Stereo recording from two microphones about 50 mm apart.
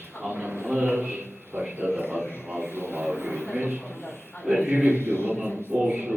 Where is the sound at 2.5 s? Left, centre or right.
Right.